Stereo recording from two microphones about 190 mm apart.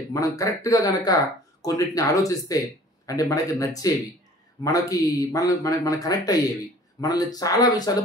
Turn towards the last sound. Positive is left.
turn(degrees=20)  # may be behind; listen again after turning